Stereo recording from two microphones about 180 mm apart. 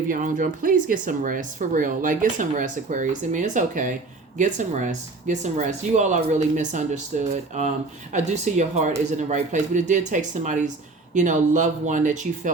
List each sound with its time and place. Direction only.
0.1 s speech: 45° right (ahead or behind)